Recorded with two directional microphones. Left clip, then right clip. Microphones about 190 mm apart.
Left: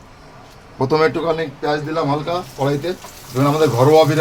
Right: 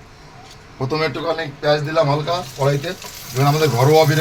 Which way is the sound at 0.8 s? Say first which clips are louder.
Left 5 dB; 35° left (ahead or behind).